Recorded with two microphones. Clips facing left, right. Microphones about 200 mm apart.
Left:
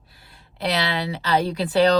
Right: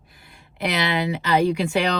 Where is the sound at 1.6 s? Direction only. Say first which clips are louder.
Left 4 dB; 35° left (ahead or behind).